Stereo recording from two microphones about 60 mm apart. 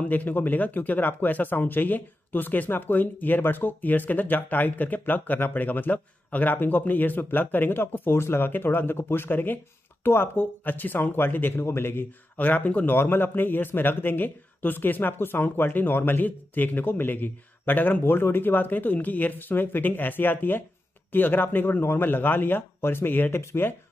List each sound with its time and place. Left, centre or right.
0.0 s speech: left
12.4 s speech: left
12.9 s speech: left